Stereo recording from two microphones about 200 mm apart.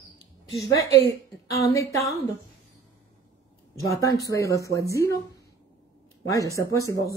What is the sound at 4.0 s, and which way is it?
Speech, 15° left (ahead or behind).